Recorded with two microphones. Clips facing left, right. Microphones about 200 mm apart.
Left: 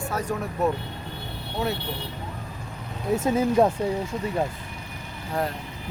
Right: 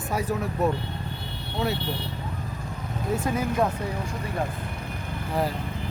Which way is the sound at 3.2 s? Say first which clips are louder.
Left 6 dB; 30° left (ahead or behind).